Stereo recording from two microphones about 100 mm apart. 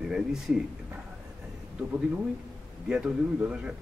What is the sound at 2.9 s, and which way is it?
Speech, 10° right (ahead or behind).